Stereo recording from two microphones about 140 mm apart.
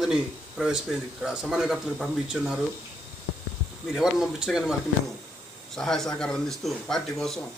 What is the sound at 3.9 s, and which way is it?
Speech, 5° right (ahead or behind).